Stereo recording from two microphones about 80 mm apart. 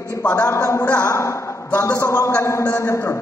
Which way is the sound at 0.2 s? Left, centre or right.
Left.